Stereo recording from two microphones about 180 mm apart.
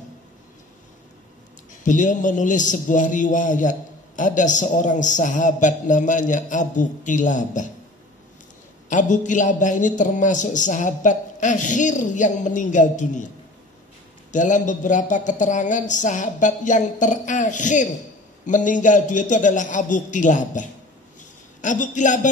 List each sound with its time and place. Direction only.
1.8 s a man's voice: 45° left (ahead or behind)
8.8 s a man's voice: 45° left (ahead or behind)
14.3 s a man's voice: 45° left (ahead or behind)